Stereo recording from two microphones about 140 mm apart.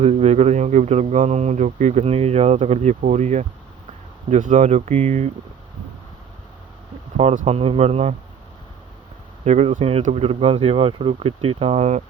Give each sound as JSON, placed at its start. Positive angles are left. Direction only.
{"t": 0.0, "sound": "speech", "side_deg": -50}
{"t": 4.3, "sound": "speech", "side_deg": -65}
{"t": 7.2, "sound": "speech", "side_deg": -50}
{"t": 9.4, "sound": "speech", "side_deg": -55}